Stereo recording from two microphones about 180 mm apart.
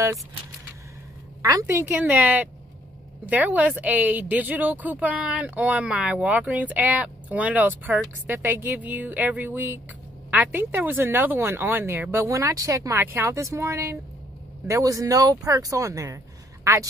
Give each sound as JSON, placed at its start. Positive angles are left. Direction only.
{"t": 1.4, "sound": "a woman's voice", "side_deg": -20}